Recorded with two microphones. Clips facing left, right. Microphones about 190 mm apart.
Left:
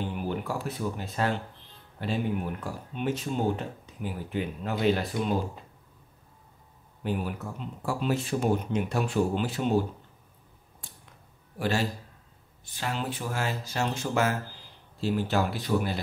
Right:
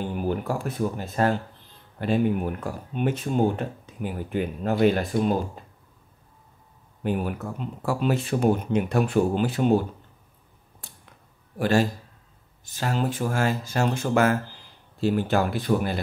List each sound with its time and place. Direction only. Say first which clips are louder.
0.1 s speech: right 5 dB; 45° right (ahead or behind)
7.0 s speech: right 4 dB; 50° right (ahead or behind)
7.8 s speech: right 4 dB; 60° right (ahead or behind)
11.5 s a man's voice: right 6 dB; 50° right (ahead or behind)